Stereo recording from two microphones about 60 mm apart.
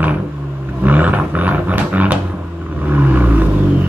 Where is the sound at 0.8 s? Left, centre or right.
Right.